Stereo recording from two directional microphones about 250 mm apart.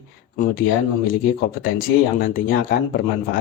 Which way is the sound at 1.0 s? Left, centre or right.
Left.